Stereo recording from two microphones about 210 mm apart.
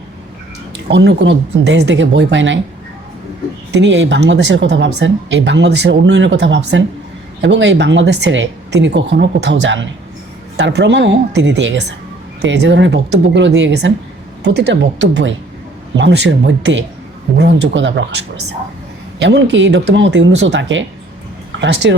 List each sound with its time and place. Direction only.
0.9 s speech: 55° right (ahead or behind)
3.7 s speech: 60° right (ahead or behind)
19.2 s speech: 55° right (ahead or behind)